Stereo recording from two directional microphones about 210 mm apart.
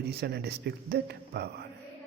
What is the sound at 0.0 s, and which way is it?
A man's voice, 50° right (ahead or behind).